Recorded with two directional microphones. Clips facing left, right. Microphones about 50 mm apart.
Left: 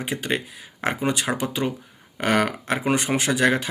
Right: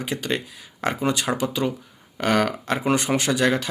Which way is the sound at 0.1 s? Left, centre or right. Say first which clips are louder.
Even; left.